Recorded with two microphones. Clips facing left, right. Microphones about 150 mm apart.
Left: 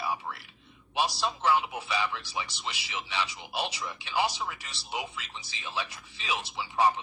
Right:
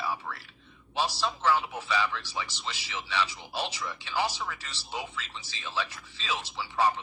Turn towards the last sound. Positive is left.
turn(degrees=15)  # may be behind; listen again after turning